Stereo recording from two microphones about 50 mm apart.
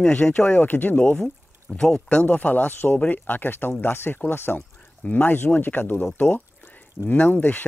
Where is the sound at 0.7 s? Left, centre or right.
Left.